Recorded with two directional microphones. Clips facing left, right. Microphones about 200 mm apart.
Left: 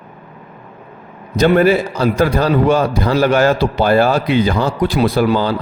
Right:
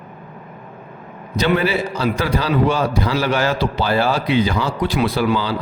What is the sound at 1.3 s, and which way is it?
A man's voice, 50° left (ahead or behind).